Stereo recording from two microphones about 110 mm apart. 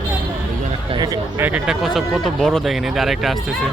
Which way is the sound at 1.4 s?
15° right (ahead or behind).